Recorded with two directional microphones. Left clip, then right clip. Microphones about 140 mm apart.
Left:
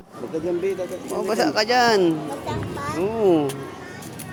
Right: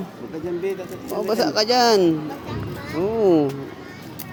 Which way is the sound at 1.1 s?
30° right (ahead or behind).